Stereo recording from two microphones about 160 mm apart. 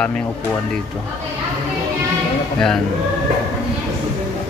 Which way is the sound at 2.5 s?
5° left (ahead or behind).